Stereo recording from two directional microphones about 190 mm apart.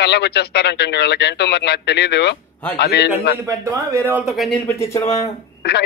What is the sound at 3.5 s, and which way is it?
Speech, 15° right (ahead or behind).